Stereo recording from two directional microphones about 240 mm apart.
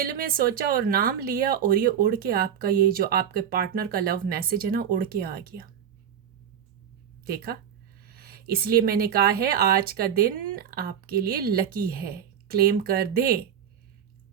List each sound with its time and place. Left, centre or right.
0.0 s speech: right
7.3 s speech: right